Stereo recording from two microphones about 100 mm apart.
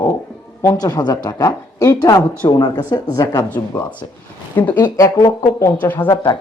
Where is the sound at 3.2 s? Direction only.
30° left (ahead or behind).